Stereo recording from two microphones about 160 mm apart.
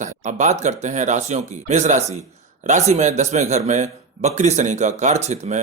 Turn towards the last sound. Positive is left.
turn(degrees=-45)  # may be behind; listen again after turning